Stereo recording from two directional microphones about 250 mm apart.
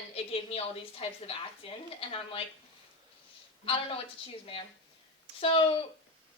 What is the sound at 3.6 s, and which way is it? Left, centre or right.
Speech, left.